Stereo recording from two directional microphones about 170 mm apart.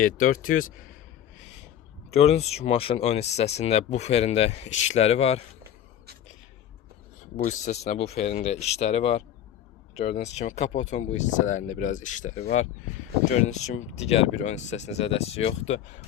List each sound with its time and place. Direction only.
0.0 s speech: 55° left (ahead or behind)
2.1 s speech: 40° left (ahead or behind)
7.3 s speech: 45° left (ahead or behind)